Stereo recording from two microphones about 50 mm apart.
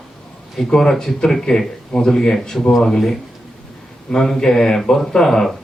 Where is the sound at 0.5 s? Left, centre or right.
Centre.